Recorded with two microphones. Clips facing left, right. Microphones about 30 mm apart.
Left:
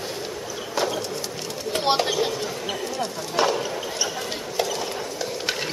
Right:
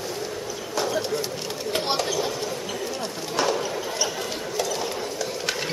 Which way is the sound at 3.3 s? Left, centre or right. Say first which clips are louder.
Left 2 dB; centre.